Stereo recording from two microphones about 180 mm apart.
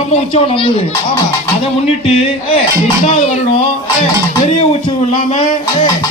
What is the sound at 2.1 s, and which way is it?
A man's voice, 30° left (ahead or behind).